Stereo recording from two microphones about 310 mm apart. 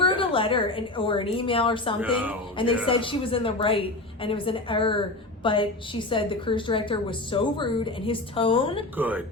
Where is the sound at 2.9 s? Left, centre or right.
Centre.